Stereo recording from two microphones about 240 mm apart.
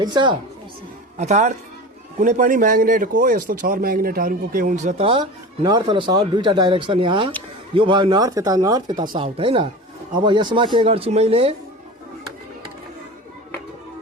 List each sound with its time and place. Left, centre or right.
0.0 s speech: centre
1.2 s speech: right